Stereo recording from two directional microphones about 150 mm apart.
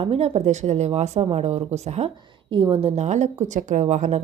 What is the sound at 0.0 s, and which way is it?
A woman's voice, 40° right (ahead or behind).